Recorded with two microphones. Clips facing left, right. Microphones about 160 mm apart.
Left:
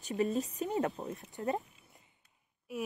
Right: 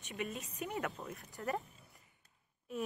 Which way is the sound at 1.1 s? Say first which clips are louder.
Left 4 dB; 20° left (ahead or behind).